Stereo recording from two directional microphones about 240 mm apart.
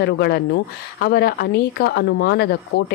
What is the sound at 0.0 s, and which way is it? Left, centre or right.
A woman's voice, left.